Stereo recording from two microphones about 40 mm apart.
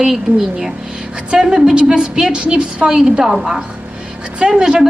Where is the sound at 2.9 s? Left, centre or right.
Centre.